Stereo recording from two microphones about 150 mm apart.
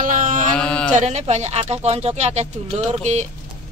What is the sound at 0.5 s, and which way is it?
Speech, 5° left (ahead or behind).